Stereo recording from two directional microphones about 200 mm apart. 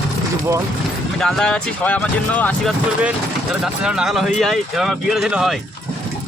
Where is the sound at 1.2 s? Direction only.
Centre (ahead or behind).